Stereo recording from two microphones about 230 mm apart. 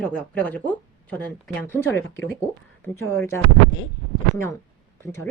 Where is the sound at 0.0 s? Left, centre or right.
Centre.